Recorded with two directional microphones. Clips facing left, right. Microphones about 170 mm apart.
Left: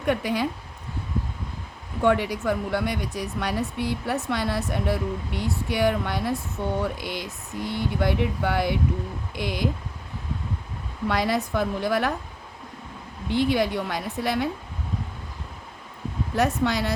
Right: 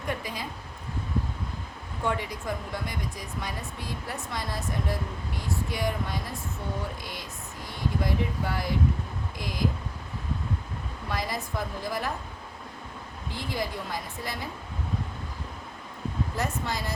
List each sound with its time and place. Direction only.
0.0 s speech: 70° left (ahead or behind)
2.0 s speech: 75° left (ahead or behind)
11.1 s speech: 70° left (ahead or behind)
13.3 s speech: 70° left (ahead or behind)
16.3 s speech: 70° left (ahead or behind)